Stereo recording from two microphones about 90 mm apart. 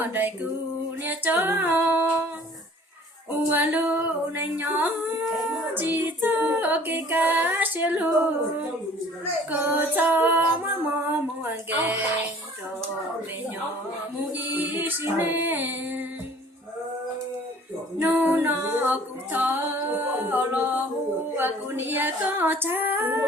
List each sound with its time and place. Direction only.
0.0 s female singing: 20° right (ahead or behind)
1.0 s singing: 20° right (ahead or behind)
3.5 s female singing: 20° right (ahead or behind)
14.3 s female singing: 20° right (ahead or behind)
18.0 s female singing: 20° right (ahead or behind)